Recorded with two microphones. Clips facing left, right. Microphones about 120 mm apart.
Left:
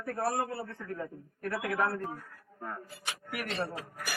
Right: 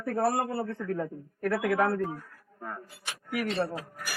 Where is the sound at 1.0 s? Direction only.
65° right (ahead or behind).